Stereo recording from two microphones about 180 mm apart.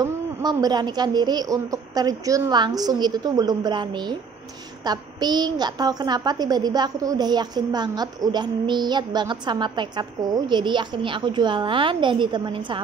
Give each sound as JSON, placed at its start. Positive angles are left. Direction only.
{"t": 0.0, "sound": "a woman's voice", "side_deg": -20}